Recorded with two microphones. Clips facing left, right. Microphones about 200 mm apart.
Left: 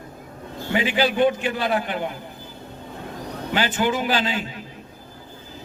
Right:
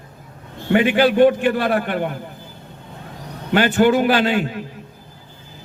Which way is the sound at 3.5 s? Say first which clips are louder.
Right 8 dB; 60° right (ahead or behind).